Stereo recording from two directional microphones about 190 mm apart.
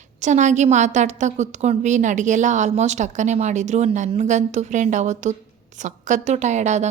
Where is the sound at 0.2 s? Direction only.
40° right (ahead or behind).